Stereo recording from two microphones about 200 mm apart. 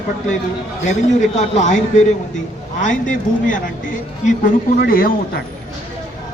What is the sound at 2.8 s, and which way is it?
A man's voice, 40° left (ahead or behind).